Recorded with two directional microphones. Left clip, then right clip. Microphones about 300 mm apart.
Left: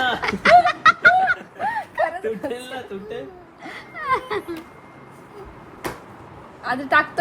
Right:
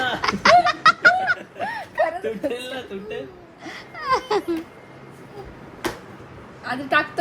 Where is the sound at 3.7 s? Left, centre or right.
Centre.